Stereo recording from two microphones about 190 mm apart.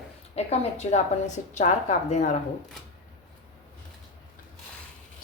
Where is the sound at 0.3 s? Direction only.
35° left (ahead or behind).